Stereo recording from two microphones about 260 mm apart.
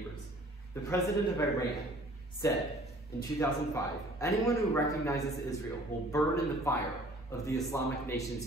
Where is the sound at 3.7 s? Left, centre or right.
Centre.